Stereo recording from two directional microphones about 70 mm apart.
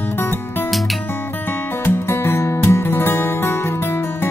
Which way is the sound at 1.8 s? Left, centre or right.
Left.